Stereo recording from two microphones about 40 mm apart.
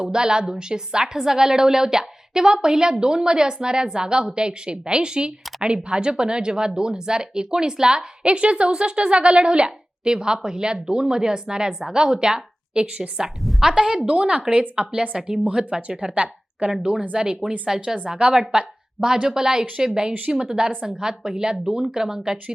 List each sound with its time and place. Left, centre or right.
0.0 s a woman's voice: centre
13.4 s a sound: centre
13.7 s a woman's voice: right
16.1 s a woman's voice: right
17.2 s a woman's voice: centre